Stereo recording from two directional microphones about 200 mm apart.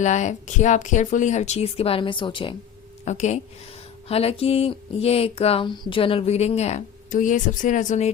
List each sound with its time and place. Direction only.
0.0 s speech: 35° left (ahead or behind)
3.0 s a woman's voice: 35° left (ahead or behind)